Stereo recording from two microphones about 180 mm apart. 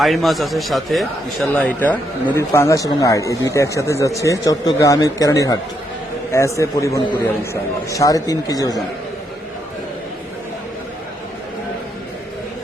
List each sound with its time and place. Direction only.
0.0 s a man's voice: centre (ahead or behind); by 8.8 s 20° left (ahead or behind)